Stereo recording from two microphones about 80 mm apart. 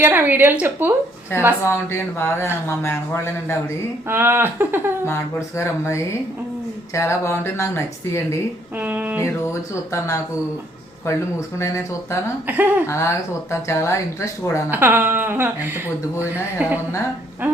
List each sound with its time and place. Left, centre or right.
0.0 s speech: right
1.3 s speech: left
4.1 s speech: right
5.0 s speech: left
8.8 s speech: right
9.2 s speech: left
12.5 s speech: right
12.9 s speech: left
14.7 s speech: right